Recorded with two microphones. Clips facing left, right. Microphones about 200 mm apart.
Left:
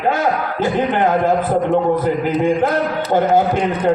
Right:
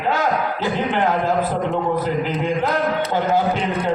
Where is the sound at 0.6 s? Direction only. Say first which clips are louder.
Left 6 dB; 50° left (ahead or behind).